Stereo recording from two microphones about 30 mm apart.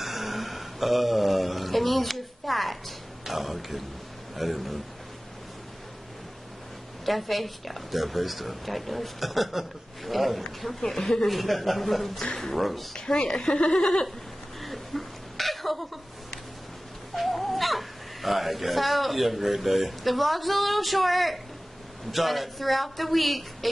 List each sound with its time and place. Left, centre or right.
0.0 s a sound: centre
4.4 s a woman's voice: centre
7.1 s a woman's voice: centre
11.0 s speech: centre
11.2 s a woman's voice: centre
12.9 s speech: left
14.6 s laughter: centre
17.1 s a woman's voice: centre